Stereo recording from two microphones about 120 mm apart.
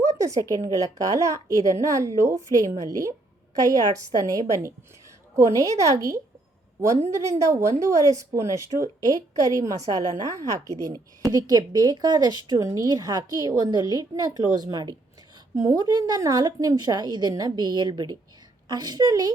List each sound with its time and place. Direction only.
0.2 s a woman's voice: 30° right (ahead or behind)